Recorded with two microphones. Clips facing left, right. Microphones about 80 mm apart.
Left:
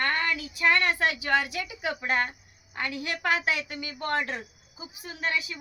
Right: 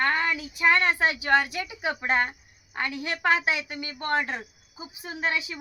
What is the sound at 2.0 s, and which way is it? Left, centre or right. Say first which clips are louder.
A woman's voice: right 3 dB; centre.